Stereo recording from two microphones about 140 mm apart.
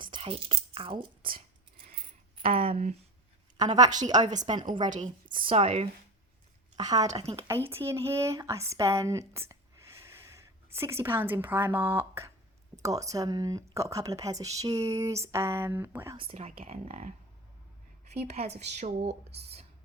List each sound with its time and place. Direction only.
0.0 s whispering: 40° right (ahead or behind)
1.9 s coin: 40° right (ahead or behind)
3.6 s a woman's voice: 30° right (ahead or behind)
4.9 s a woman's voice: 65° right (ahead or behind)
5.3 s speech: 35° right (ahead or behind)
6.7 s speech: 30° right (ahead or behind)
10.0 s snort: 20° right (ahead or behind)
10.8 s speech: 20° right (ahead or behind)
16.3 s speech: 60° right (ahead or behind)
18.1 s speech: 50° right (ahead or behind)